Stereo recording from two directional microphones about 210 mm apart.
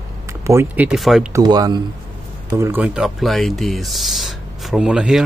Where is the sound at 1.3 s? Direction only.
20° right (ahead or behind).